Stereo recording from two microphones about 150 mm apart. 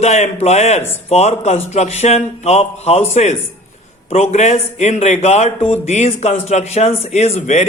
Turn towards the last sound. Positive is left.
turn(degrees=45)  # may be behind; listen again after turning